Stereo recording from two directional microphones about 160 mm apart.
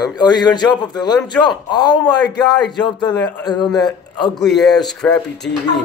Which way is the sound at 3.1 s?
10° left (ahead or behind).